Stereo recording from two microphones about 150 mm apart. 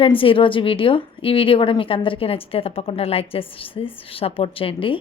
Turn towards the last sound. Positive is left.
turn(degrees=35)  # may be behind; listen again after turning